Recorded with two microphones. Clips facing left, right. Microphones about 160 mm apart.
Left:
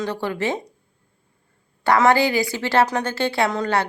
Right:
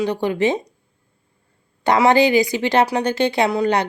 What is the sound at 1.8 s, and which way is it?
Speech, 15° right (ahead or behind).